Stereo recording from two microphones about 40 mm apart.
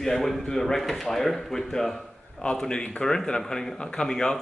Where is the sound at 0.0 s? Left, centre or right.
Centre.